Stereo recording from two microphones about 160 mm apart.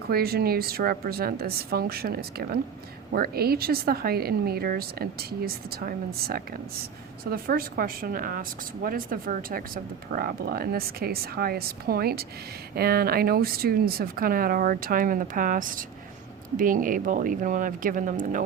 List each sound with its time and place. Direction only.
0.1 s speech: 70° right (ahead or behind); by 18.4 s 55° right (ahead or behind)